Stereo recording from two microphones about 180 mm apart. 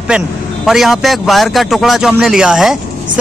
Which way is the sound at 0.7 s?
Centre (ahead or behind).